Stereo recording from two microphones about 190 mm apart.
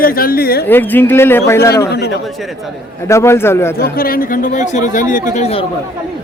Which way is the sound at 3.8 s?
50° left (ahead or behind).